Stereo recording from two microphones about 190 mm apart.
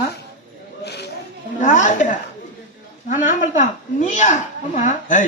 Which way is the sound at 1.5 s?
40° left (ahead or behind).